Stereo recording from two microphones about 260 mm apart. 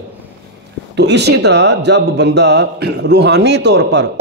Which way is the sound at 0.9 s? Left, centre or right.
Right.